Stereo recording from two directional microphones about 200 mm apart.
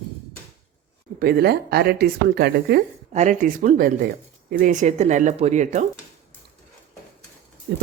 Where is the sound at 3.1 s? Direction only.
35° right (ahead or behind).